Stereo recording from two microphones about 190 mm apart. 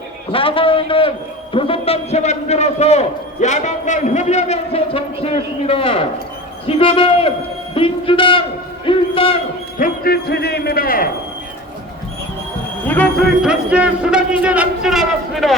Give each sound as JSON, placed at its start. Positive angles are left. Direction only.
{"t": 0.3, "sound": "a man's voice", "side_deg": 30}
{"t": 9.7, "sound": "a man's voice", "side_deg": 50}
{"t": 12.9, "sound": "speech", "side_deg": 5}